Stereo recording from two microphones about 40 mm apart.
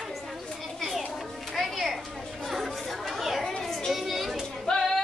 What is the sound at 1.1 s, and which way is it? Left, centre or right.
Music, centre.